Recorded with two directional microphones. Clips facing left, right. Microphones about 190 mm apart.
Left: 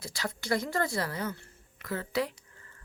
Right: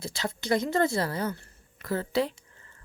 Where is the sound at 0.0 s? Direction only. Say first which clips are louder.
Right 4 dB; 25° right (ahead or behind).